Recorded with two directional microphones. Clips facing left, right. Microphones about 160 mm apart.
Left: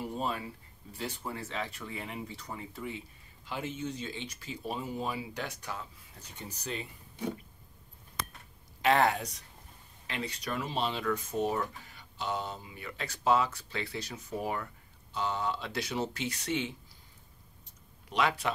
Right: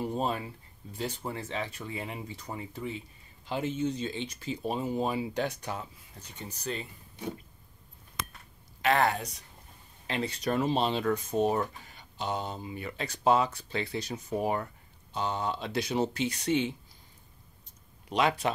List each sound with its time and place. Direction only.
0.0 s a sound: 30° right (ahead or behind)
0.9 s speech: 25° right (ahead or behind)
6.4 s speech: 10° left (ahead or behind)
8.8 s speech: centre (ahead or behind)
10.2 s speech: 45° right (ahead or behind)
10.6 s speech: 30° right (ahead or behind)
18.1 s speech: 20° right (ahead or behind)